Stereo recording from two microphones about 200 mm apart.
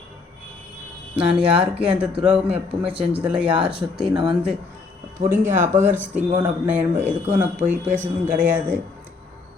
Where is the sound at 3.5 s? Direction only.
25° right (ahead or behind).